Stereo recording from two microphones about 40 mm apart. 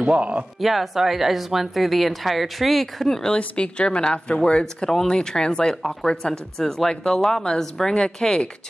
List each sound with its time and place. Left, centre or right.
0.0 s speech: right
0.6 s speech: centre
3.3 s a woman's voice: left